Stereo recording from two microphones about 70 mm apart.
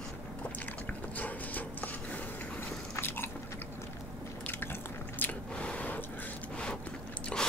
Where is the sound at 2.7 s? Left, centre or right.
Left.